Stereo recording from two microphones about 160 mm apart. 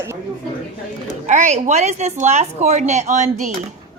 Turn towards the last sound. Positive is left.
turn(degrees=-50)  # may be behind; listen again after turning